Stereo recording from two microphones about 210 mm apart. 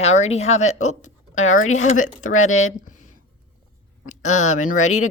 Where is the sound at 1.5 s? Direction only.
75° left (ahead or behind).